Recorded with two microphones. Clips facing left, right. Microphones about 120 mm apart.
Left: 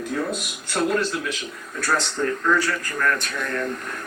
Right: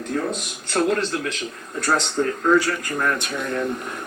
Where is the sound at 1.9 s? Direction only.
35° right (ahead or behind).